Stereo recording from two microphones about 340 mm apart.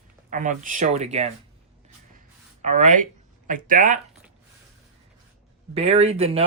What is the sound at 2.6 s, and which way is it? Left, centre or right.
Speech, right.